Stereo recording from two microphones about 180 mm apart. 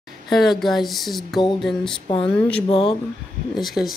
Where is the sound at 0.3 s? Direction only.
Centre (ahead or behind).